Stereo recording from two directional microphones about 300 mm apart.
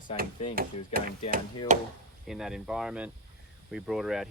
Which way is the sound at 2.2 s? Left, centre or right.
Centre.